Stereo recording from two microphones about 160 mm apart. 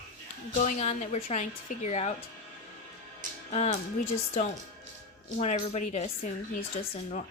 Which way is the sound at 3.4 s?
45° left (ahead or behind).